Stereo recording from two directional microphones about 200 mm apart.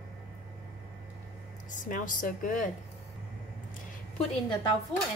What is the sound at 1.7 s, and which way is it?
Speech, 40° left (ahead or behind).